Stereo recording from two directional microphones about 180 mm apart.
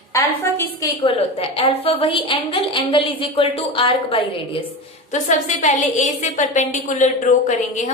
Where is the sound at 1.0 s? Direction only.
30° left (ahead or behind).